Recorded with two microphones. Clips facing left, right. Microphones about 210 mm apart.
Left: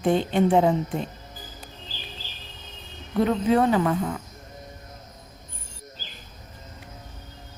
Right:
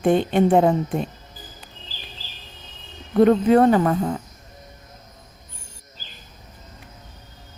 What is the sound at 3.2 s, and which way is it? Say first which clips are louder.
Speech: right 6 dB; 50° right (ahead or behind).